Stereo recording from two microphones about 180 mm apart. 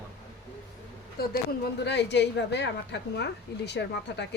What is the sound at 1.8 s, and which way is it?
Speech, 70° left (ahead or behind).